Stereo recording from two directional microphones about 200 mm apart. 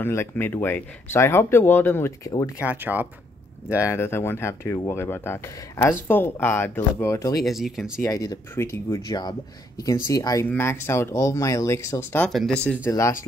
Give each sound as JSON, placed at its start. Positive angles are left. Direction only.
{"t": 0.0, "sound": "speech", "side_deg": 10}
{"t": 2.6, "sound": "speech", "side_deg": -10}
{"t": 3.8, "sound": "speech", "side_deg": 15}
{"t": 7.3, "sound": "speech", "side_deg": 0}
{"t": 8.0, "sound": "speech", "side_deg": 15}
{"t": 12.3, "sound": "speech", "side_deg": 0}